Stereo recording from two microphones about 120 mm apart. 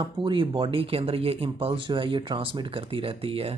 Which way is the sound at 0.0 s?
45° right (ahead or behind).